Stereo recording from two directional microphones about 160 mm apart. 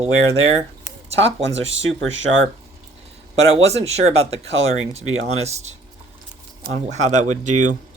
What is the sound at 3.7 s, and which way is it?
Speech, 40° right (ahead or behind).